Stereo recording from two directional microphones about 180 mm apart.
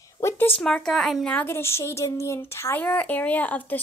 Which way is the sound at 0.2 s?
15° left (ahead or behind).